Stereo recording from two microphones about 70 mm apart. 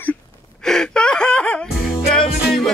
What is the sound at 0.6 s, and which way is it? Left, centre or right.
Gasp, centre.